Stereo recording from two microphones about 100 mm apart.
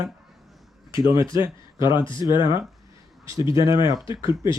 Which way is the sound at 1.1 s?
30° right (ahead or behind).